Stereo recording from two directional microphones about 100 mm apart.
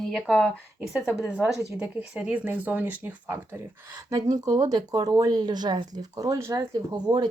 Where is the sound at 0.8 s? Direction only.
10° right (ahead or behind).